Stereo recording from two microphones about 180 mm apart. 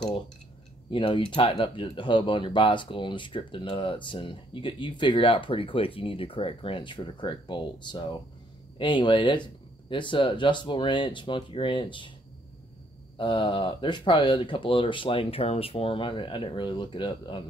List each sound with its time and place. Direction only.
0.8 s speech: 30° left (ahead or behind)
13.2 s speech: 30° left (ahead or behind)